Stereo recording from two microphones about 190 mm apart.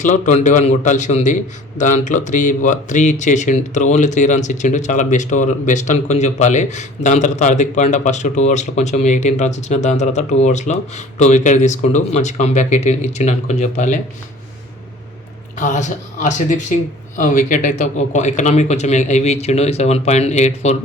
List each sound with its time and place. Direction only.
0.0 s speech: 40° left (ahead or behind)
15.5 s speech: 40° left (ahead or behind)